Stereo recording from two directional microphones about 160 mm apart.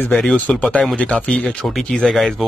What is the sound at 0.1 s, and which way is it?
Speech, 5° left (ahead or behind).